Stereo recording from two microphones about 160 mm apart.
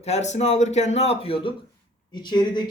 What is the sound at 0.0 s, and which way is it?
A man's voice, 45° left (ahead or behind).